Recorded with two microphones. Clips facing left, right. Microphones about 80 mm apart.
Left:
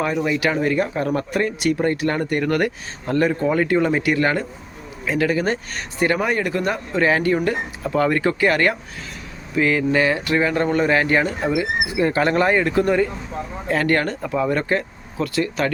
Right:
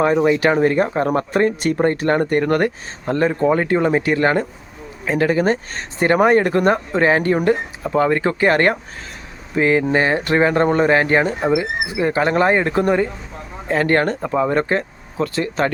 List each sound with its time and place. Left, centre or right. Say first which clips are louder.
0.0 s speech: right 6 dB; right
6.1 s speech: right 7 dB; right